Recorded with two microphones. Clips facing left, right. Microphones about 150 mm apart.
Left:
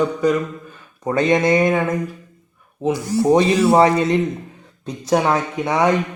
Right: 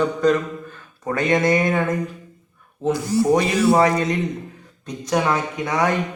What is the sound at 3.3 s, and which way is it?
A man's voice, 25° left (ahead or behind).